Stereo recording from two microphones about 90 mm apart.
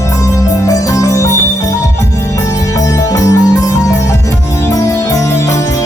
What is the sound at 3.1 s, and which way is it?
Music, 40° left (ahead or behind).